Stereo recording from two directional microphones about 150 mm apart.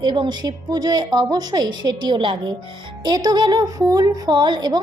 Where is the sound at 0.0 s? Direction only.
30° right (ahead or behind).